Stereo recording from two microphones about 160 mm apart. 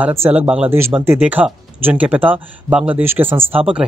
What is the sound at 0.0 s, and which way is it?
Speech, 15° right (ahead or behind).